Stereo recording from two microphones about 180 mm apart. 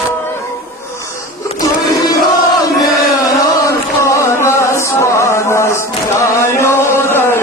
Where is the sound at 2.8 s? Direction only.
Centre (ahead or behind).